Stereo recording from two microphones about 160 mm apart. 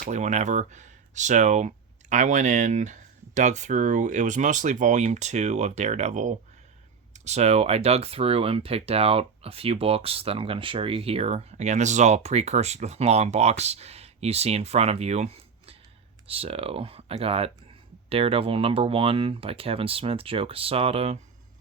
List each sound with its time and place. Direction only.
0.0 s speech: 45° right (ahead or behind)